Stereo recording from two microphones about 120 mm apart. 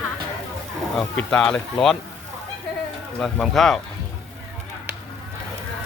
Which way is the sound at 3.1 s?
5° left (ahead or behind).